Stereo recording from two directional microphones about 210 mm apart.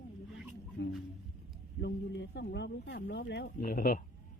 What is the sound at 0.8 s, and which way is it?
A man's voice, 55° left (ahead or behind).